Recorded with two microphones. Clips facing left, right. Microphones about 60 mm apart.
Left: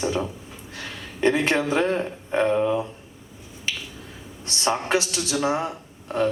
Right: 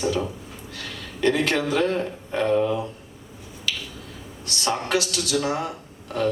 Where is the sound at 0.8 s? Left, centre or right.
Left.